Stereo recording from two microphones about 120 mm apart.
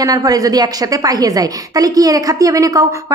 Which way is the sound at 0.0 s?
30° right (ahead or behind).